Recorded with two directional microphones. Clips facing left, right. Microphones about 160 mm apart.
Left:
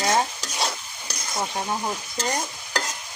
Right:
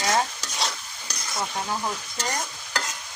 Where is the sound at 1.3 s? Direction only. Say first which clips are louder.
Left 2 dB; 20° left (ahead or behind).